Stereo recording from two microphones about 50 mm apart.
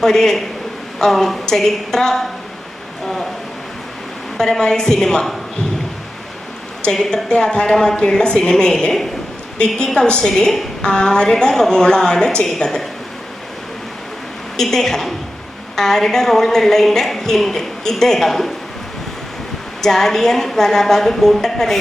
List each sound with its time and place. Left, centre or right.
0.0 s a woman's voice: centre
4.4 s a woman's voice: centre
6.9 s a woman's voice: centre
14.5 s a woman's voice: centre
19.8 s a woman's voice: centre